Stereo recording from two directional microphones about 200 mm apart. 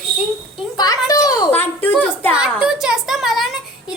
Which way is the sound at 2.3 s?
5° right (ahead or behind).